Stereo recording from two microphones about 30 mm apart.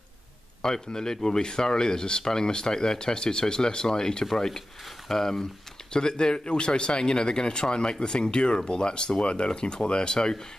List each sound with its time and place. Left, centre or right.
0.6 s speech: left
4.3 s rub: centre
5.0 s speech: centre
5.9 s speech: left
9.5 s speech: left